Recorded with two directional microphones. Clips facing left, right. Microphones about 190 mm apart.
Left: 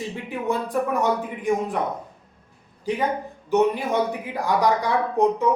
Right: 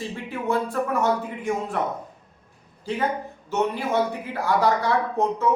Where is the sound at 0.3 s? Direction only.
15° left (ahead or behind).